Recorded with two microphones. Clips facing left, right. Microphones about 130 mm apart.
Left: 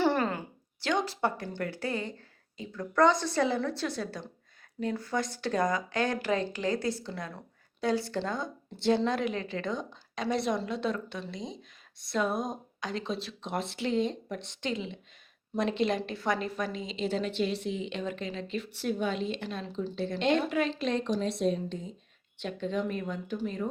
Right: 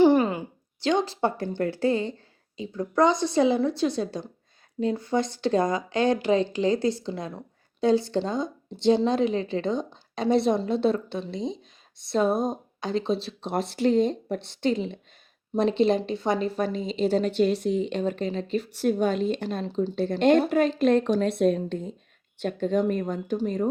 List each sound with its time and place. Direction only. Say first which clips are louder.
0.0 s a woman's voice: right 8 dB; 15° right (ahead or behind); by 14.9 s 40° right (ahead or behind)
15.5 s speech: right 7 dB; 30° right (ahead or behind); by 21.9 s 55° right (ahead or behind)
22.4 s speech: right 7 dB; 45° right (ahead or behind)